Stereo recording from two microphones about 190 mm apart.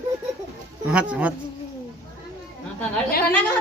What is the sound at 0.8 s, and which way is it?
Speech, 5° right (ahead or behind).